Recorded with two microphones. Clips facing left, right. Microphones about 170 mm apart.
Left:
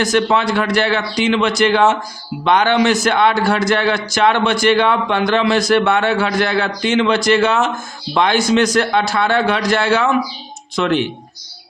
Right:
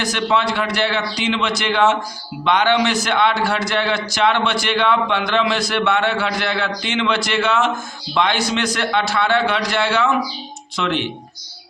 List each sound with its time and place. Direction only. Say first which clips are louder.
0.0 s a man's voice: left 4 dB; 45° left (ahead or behind)